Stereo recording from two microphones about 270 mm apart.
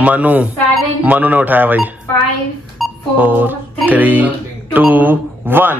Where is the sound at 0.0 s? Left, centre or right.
Centre.